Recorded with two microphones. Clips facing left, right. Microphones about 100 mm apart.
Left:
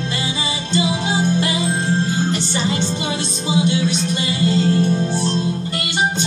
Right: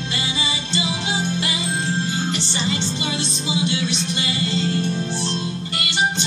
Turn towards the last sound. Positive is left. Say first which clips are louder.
# left 2 dB
turn(degrees=45)  # may be behind; listen again after turning